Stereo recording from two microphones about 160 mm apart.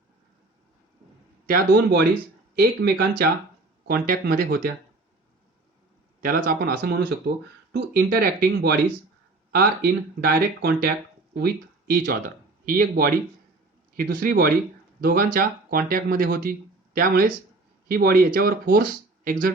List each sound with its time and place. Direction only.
1.5 s speech: 75° right (ahead or behind)
6.2 s speech: 65° right (ahead or behind)